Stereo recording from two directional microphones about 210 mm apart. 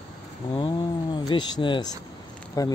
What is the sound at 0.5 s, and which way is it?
Speech, 20° left (ahead or behind).